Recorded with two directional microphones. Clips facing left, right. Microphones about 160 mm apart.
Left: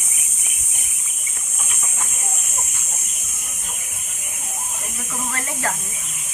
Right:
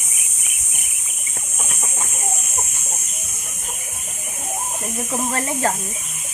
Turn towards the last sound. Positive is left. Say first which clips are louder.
# right 6 dB
turn(degrees=-30)  # may be behind; listen again after turning